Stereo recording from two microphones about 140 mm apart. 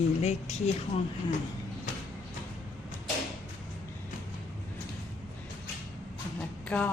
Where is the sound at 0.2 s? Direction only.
50° left (ahead or behind).